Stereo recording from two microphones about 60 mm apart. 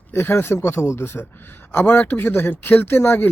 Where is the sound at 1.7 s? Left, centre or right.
Left.